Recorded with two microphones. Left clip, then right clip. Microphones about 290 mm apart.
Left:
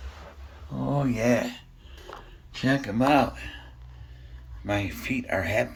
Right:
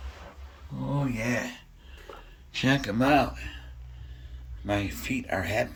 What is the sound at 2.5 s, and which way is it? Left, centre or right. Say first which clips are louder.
Speech: even; centre.